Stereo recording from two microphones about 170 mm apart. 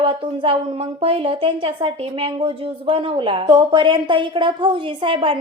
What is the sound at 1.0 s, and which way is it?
A woman's voice, 35° right (ahead or behind).